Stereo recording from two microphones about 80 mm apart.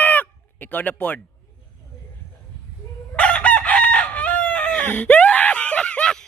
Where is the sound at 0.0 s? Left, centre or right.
Left.